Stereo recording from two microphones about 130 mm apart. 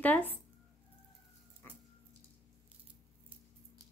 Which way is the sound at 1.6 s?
15° left (ahead or behind).